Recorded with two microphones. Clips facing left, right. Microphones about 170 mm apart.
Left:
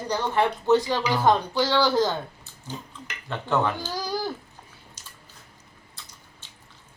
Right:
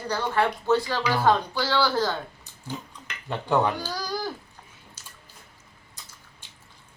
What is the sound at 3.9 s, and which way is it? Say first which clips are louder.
Babbling: left 2 dB; 15° left (ahead or behind).